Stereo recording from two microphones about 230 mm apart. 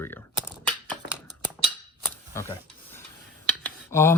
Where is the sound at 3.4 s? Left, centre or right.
Centre.